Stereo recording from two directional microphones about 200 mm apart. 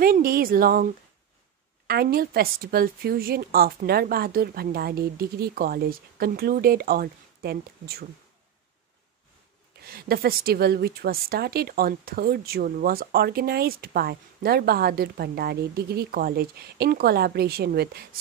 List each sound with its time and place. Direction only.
0.0 s speech: 45° right (ahead or behind)
1.9 s a woman's voice: 50° right (ahead or behind)
9.8 s a woman's voice: 50° right (ahead or behind)